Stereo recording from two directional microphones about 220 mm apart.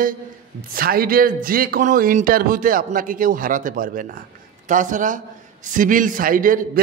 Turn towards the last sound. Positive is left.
turn(degrees=-40)  # may be behind; listen again after turning